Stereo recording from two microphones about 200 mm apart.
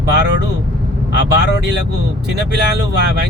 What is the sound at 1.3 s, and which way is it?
Speech, 55° right (ahead or behind).